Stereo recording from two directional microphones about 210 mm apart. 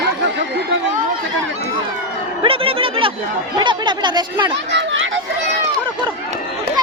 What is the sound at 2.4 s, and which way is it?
Speech, 25° right (ahead or behind).